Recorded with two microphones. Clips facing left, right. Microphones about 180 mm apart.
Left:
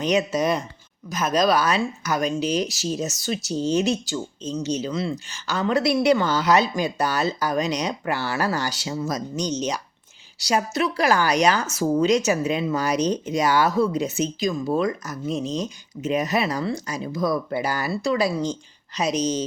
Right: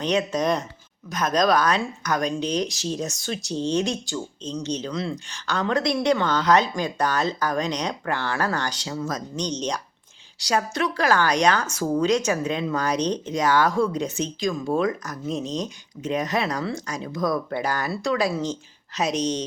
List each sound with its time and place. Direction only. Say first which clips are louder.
0.0 s speech: left 1 dB; 5° left (ahead or behind)